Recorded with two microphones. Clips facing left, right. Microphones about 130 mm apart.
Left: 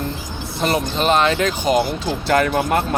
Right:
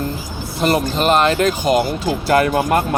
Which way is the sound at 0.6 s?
40° right (ahead or behind).